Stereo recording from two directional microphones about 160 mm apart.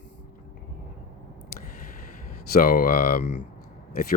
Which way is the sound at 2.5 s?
65° left (ahead or behind).